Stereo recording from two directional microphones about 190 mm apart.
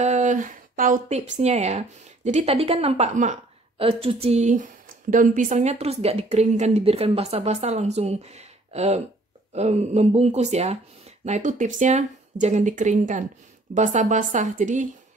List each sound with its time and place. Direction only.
0.0 s a woman's voice: 40° right (ahead or behind)